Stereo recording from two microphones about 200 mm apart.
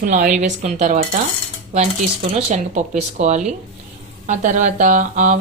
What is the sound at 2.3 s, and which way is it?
A woman's voice, 35° right (ahead or behind).